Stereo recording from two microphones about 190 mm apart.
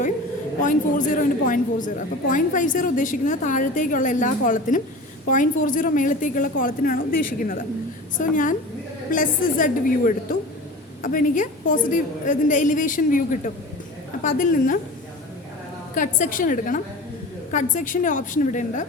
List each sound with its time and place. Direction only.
0.6 s a woman's voice: 45° left (ahead or behind)
16.0 s a woman's voice: 40° left (ahead or behind)